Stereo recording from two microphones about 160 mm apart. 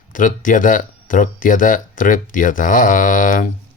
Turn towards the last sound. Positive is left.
turn(degrees=55)  # may be behind; listen again after turning